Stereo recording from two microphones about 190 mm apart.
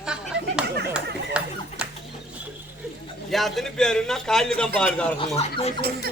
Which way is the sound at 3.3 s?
Centre (ahead or behind).